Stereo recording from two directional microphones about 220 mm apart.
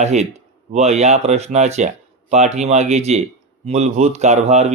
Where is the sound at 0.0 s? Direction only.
30° right (ahead or behind).